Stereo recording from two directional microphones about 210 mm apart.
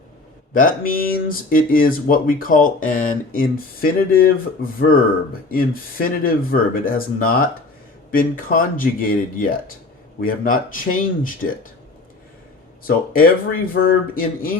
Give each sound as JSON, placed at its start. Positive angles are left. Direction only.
{"t": 0.5, "sound": "speech", "side_deg": 40}
{"t": 13.1, "sound": "speech", "side_deg": 40}